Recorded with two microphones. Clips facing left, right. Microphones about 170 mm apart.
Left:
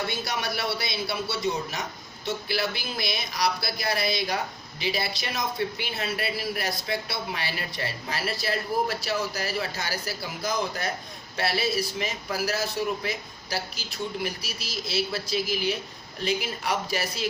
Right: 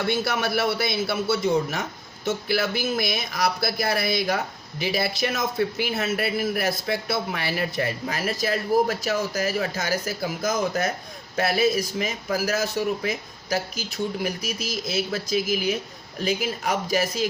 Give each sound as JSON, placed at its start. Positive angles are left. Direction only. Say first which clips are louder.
{"t": 0.1, "sound": "speech", "louder": "right 7 dB", "side_deg": -55}